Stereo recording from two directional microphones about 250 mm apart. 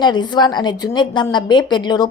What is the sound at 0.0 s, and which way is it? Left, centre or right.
A woman's voice, centre.